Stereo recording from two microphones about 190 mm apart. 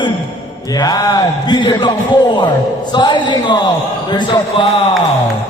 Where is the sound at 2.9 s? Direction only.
25° left (ahead or behind).